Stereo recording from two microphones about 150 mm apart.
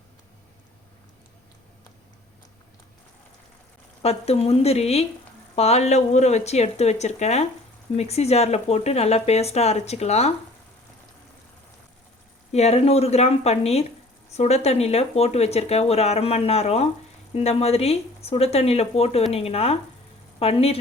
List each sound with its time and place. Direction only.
4.0 s speech: 45° left (ahead or behind)
12.5 s speech: 45° left (ahead or behind)